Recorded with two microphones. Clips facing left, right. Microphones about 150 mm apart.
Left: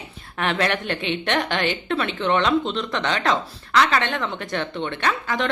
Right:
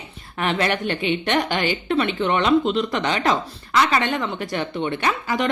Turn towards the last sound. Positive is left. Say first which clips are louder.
# right 1 dB
turn(degrees=-5)  # may be behind; listen again after turning